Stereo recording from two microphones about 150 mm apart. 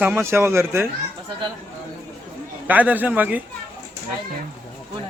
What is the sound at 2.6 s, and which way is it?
Speech, 10° right (ahead or behind).